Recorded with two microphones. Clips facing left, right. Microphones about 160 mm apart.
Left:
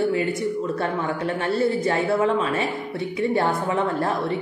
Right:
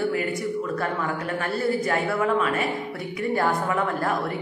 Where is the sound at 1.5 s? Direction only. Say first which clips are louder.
Left 2 dB; 25° left (ahead or behind).